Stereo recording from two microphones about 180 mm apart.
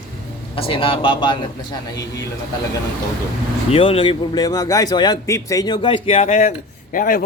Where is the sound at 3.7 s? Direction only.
30° left (ahead or behind).